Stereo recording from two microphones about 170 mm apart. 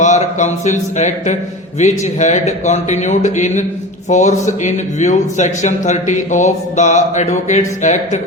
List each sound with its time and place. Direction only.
0.0 s a man's voice: 45° left (ahead or behind)